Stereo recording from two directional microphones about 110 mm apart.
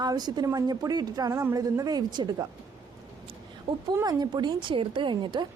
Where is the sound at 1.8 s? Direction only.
40° right (ahead or behind).